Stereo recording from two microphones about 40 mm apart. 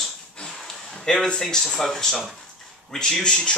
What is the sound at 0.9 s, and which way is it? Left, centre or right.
Speech, centre.